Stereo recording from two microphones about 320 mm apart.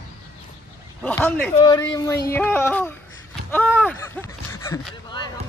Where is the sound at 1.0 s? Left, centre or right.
Centre.